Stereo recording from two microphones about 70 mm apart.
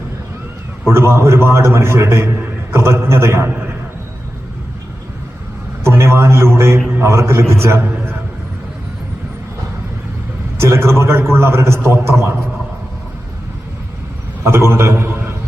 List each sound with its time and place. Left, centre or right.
0.9 s a man's voice: right
5.8 s a sound: right
7.0 s a man's voice: right
10.6 s a man's voice: right
14.4 s a man's voice: right